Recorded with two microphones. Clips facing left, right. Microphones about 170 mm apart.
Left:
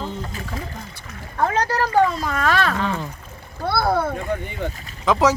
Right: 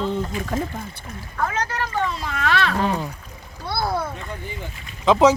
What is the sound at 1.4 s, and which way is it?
Speech, 35° left (ahead or behind).